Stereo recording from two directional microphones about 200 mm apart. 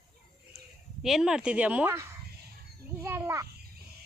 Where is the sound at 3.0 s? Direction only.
15° right (ahead or behind).